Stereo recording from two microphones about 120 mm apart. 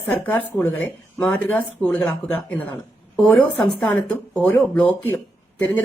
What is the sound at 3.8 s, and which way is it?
Speech, 15° left (ahead or behind).